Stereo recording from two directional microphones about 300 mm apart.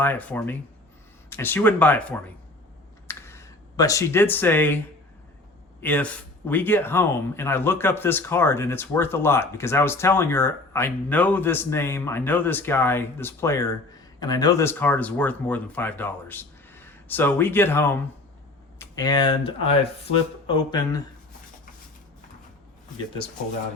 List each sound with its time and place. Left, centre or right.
0.0 s a man's voice: centre
3.1 s a sound: centre
5.8 s a man's voice: centre